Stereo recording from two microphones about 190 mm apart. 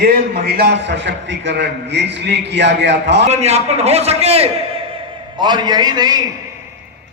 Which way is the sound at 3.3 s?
35° right (ahead or behind).